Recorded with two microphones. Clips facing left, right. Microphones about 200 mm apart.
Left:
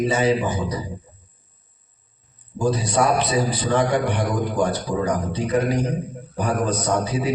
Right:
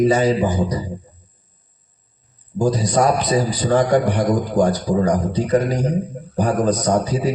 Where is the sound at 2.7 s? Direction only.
40° right (ahead or behind).